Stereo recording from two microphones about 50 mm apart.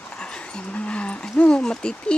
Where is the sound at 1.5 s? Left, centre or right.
Centre.